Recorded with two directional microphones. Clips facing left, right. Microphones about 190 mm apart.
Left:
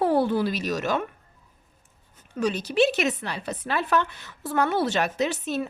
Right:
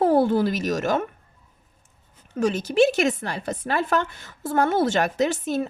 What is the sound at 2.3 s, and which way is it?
Speech, 50° right (ahead or behind).